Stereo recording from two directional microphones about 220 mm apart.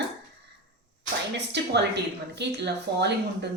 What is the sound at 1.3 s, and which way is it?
Speech, 50° right (ahead or behind).